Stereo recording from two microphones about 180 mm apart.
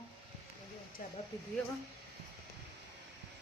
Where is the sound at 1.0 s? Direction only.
50° left (ahead or behind).